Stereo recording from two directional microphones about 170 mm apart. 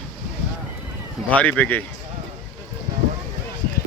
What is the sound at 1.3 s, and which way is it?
Speech, 10° left (ahead or behind).